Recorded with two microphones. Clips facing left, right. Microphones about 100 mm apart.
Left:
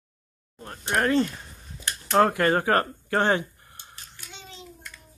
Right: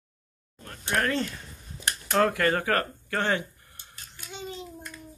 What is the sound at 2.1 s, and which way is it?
Speech, 30° left (ahead or behind).